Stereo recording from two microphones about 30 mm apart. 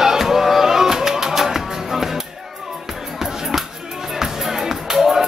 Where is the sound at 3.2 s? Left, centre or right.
Centre.